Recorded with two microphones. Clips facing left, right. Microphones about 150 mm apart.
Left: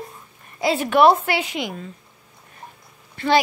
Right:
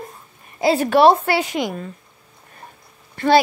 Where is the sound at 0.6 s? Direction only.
35° right (ahead or behind).